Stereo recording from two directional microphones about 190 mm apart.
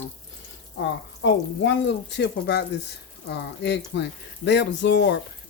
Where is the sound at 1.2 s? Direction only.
70° left (ahead or behind).